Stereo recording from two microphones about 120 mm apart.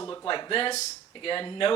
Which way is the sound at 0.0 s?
30° left (ahead or behind).